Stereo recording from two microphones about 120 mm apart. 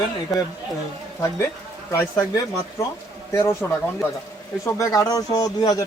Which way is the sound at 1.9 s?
25° left (ahead or behind).